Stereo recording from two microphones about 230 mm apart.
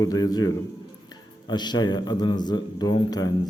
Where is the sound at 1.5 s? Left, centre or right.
Centre.